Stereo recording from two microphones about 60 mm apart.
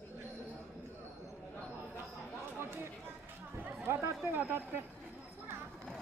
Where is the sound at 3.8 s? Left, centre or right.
Right.